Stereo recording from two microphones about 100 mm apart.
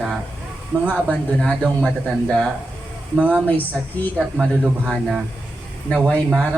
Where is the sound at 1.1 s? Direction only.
10° left (ahead or behind).